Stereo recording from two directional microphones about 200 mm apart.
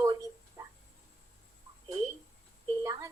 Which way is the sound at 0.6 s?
15° right (ahead or behind).